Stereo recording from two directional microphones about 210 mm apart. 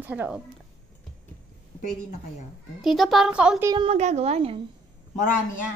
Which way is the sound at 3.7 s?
30° right (ahead or behind).